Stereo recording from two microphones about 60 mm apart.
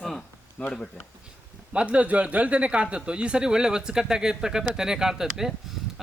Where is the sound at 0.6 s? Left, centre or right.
Left.